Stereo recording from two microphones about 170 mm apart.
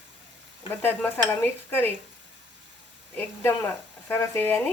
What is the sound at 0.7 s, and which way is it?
Speech, 10° left (ahead or behind).